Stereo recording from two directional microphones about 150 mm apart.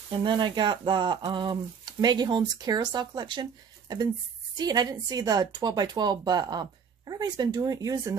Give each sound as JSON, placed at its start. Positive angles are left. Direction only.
{"t": 0.1, "sound": "speech", "side_deg": -30}
{"t": 4.6, "sound": "a woman's voice", "side_deg": -25}